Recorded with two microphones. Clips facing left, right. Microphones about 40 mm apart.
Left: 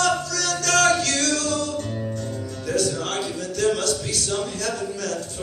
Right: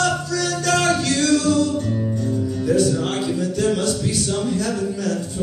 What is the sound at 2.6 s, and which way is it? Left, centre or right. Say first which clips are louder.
Music: right 5 dB; centre.